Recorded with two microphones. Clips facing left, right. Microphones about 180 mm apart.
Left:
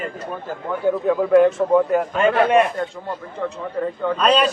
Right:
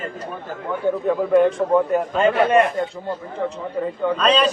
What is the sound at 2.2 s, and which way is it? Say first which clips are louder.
Speech: even; 10° left (ahead or behind).